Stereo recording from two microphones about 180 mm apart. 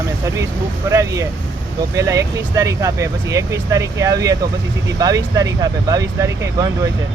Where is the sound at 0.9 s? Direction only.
15° right (ahead or behind).